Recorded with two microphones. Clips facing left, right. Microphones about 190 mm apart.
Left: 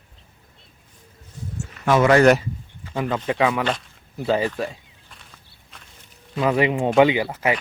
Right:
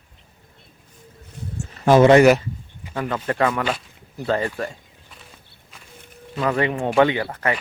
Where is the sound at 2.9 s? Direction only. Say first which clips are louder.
Left 1 dB; 10° left (ahead or behind).